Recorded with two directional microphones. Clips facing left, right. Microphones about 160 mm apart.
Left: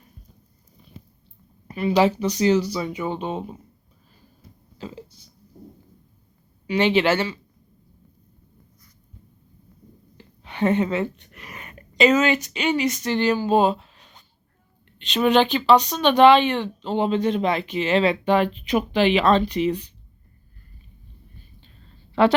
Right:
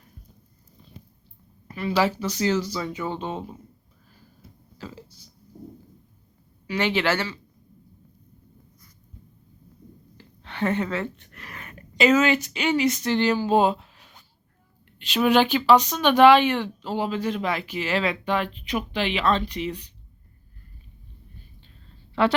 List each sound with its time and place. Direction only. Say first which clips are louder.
1.6 s speech: left 4 dB; 20° left (ahead or behind)
4.8 s burping: left 4 dB; 20° left (ahead or behind)
6.7 s speech: left 5 dB; 20° left (ahead or behind)
10.2 s a sound: left 4 dB; 15° left (ahead or behind)
12.3 s speech: left 1 dB; 15° left (ahead or behind)
13.8 s a sound: left 1 dB; 10° right (ahead or behind)
14.9 s speech: left 1 dB; 5° right (ahead or behind)
15.7 s speech: left 1 dB; 15° left (ahead or behind)